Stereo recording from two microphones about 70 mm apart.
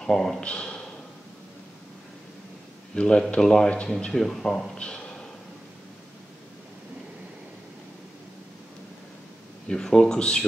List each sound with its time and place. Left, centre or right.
0.0 s speech: centre
0.4 s speech: centre
2.9 s speech: centre
9.7 s speech: centre